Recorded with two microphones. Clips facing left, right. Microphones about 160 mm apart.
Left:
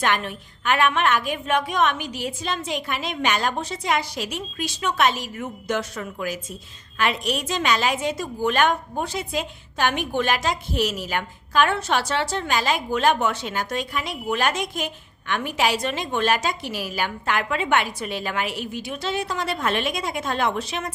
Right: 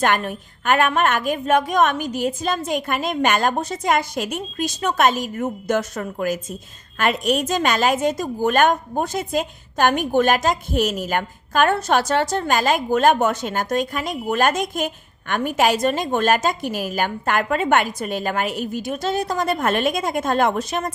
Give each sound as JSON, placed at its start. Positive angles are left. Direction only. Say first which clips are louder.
{"t": 0.0, "sound": "a woman's voice", "louder": "right 4 dB", "side_deg": -45}